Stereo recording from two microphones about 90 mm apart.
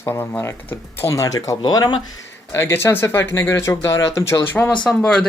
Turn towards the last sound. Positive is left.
turn(degrees=10)  # may be behind; listen again after turning